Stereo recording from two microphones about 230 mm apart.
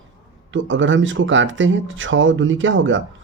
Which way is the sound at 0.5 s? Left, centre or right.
Right.